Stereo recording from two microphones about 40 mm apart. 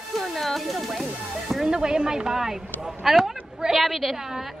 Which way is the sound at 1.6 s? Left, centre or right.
Right.